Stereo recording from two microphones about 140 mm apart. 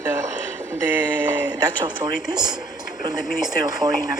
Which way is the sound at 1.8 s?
30° right (ahead or behind).